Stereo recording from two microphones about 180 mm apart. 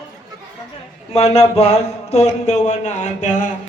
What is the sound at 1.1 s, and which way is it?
Speech, 35° left (ahead or behind).